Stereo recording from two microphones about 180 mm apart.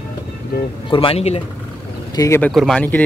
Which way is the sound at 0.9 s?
30° left (ahead or behind).